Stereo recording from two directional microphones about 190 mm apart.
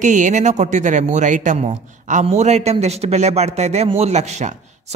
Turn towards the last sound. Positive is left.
turn(degrees=-35)  # may be behind; listen again after turning